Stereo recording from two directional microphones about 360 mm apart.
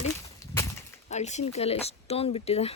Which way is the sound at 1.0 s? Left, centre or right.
Centre.